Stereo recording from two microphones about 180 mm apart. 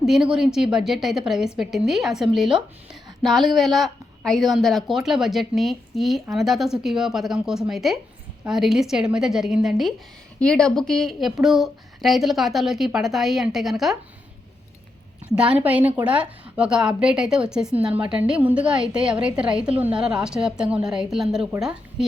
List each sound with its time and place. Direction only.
0.0 s a woman's voice: 5° right (ahead or behind)
15.4 s a woman's voice: 5° right (ahead or behind)